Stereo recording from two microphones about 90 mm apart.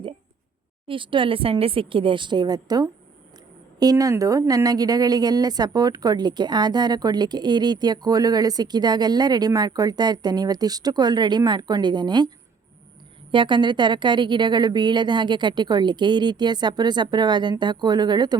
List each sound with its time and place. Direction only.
0.9 s a woman's voice: 70° right (ahead or behind)
13.3 s a woman's voice: 60° right (ahead or behind)